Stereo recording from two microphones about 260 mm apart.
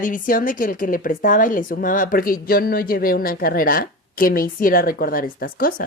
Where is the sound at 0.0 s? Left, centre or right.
Left.